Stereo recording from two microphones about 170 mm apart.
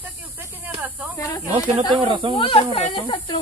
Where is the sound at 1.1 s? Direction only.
15° left (ahead or behind).